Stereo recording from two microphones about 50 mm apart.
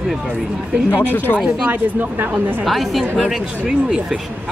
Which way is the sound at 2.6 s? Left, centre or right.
Centre.